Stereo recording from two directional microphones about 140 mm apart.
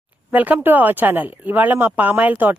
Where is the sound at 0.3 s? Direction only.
10° right (ahead or behind).